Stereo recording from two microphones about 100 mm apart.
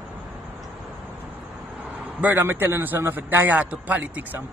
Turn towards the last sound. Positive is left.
turn(degrees=-20)  # may be behind; listen again after turning